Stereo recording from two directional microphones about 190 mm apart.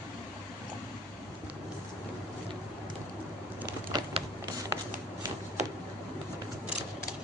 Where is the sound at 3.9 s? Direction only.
20° right (ahead or behind).